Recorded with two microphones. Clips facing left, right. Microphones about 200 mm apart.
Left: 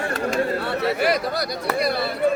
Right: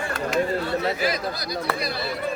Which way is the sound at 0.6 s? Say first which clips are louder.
Left 2 dB; 65° left (ahead or behind).